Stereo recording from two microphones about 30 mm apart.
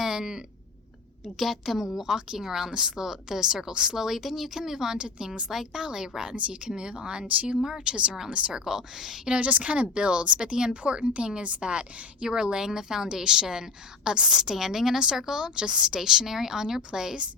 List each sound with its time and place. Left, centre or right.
0.0 s a sound: centre
1.2 s a woman's voice: centre
2.0 s a woman's voice: right
4.9 s a woman's voice: right
8.6 s a woman's voice: centre
9.4 s speech: right
9.7 s speech: right
10.8 s a woman's voice: right